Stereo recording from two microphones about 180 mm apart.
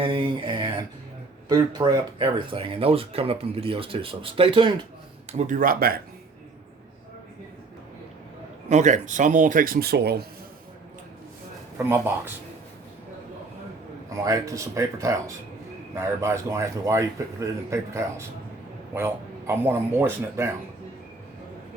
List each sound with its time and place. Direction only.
0.0 s speech: 30° right (ahead or behind)
5.4 s speech: 50° right (ahead or behind)
8.7 s speech: 40° right (ahead or behind); by 10.2 s 65° right (ahead or behind)
11.8 s speech: 10° right (ahead or behind)
14.3 s a man's voice: 15° right (ahead or behind)